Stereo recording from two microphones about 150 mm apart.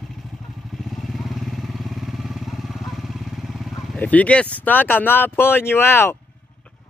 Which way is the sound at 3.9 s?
10° left (ahead or behind).